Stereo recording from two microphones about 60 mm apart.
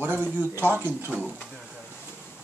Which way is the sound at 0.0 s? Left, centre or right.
Right.